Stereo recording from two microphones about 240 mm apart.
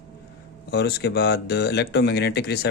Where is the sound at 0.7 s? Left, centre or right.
Left.